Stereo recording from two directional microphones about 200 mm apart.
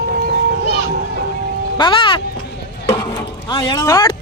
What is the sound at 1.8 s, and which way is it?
Music, 25° left (ahead or behind).